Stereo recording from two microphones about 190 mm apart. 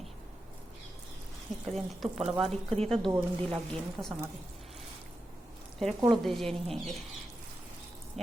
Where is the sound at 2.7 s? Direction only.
35° right (ahead or behind).